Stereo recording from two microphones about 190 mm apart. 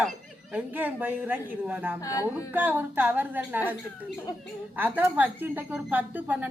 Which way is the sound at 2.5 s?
10° right (ahead or behind).